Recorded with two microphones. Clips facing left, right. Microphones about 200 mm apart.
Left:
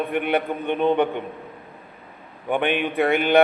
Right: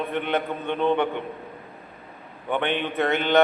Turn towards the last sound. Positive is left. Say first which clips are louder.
# left 3 dB
turn(degrees=15)  # may be behind; listen again after turning